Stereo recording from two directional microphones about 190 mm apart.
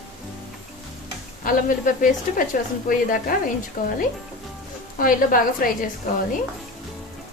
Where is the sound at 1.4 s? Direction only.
45° left (ahead or behind).